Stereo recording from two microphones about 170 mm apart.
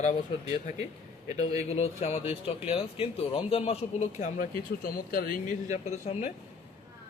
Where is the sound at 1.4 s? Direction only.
40° left (ahead or behind).